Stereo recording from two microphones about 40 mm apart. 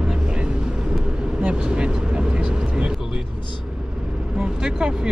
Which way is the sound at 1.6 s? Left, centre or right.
Right.